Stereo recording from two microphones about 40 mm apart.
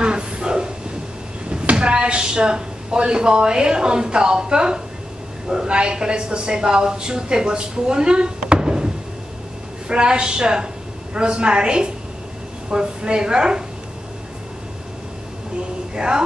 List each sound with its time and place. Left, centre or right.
0.0 s a sound: right
1.5 s a woman's voice: right
15.9 s speech: right